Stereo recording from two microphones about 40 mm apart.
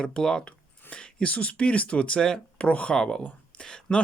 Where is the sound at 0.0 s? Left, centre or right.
Left.